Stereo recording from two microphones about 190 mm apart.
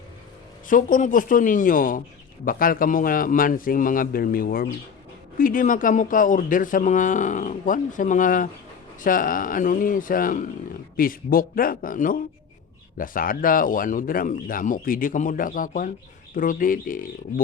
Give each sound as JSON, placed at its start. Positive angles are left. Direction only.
{"t": 0.7, "sound": "speech", "side_deg": 45}